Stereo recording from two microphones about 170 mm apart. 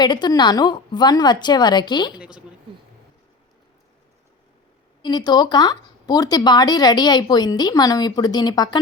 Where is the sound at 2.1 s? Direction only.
5° right (ahead or behind).